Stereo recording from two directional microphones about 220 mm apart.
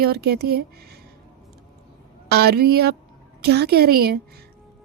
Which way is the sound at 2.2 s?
45° right (ahead or behind).